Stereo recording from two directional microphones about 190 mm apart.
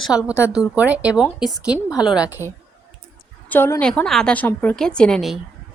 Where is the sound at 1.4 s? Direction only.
20° left (ahead or behind).